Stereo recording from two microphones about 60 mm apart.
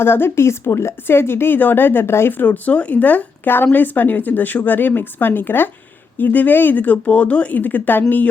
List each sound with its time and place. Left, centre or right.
0.0 s speech: left
2.4 s speech: left